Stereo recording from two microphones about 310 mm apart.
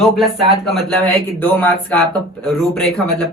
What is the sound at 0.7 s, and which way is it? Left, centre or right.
Speech, centre.